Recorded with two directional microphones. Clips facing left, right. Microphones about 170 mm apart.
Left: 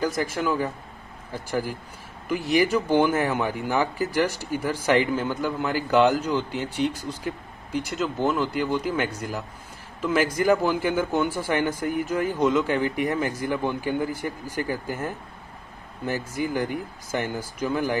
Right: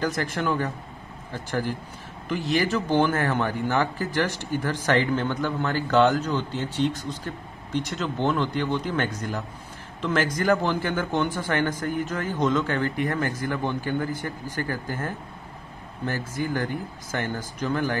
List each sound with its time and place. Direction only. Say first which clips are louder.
0.0 s a man's voice: left 1 dB; 5° left (ahead or behind)